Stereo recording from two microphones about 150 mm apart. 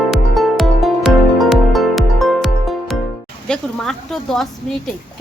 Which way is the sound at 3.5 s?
5° left (ahead or behind).